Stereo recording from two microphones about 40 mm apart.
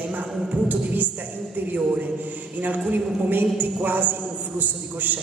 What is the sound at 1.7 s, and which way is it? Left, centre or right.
Speech, right.